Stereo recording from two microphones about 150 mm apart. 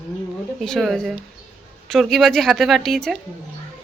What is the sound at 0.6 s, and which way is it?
A woman's voice, centre (ahead or behind).